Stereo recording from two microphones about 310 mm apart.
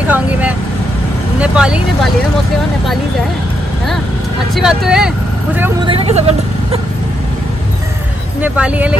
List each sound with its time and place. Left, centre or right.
0.0 s speech: centre
4.6 s speech: centre
5.9 s speech: centre
8.4 s speech: centre